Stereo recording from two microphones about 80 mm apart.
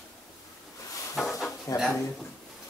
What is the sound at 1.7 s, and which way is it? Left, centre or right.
Speech, left.